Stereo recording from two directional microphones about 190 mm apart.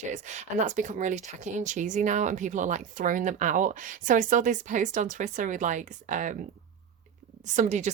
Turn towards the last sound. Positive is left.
turn(degrees=-40)  # may be behind; listen again after turning